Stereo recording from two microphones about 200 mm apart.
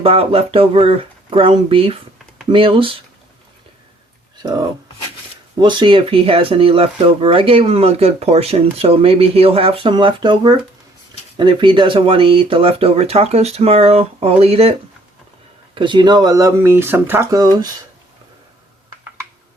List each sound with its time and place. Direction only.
0.0 s speech: 30° right (ahead or behind)
5.5 s speech: 20° right (ahead or behind)